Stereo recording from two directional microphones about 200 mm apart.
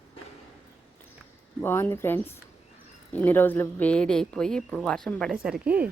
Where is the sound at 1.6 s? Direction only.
10° left (ahead or behind); by 5.9 s 5° right (ahead or behind).